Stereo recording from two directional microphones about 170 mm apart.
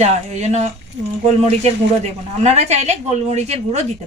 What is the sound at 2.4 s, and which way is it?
Speech, 40° right (ahead or behind).